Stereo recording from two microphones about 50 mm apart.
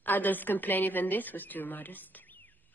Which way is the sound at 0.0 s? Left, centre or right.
Left.